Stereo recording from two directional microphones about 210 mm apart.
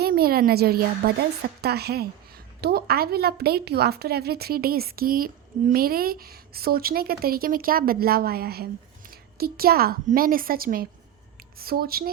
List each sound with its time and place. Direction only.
0.0 s a woman's voice: 45° right (ahead or behind)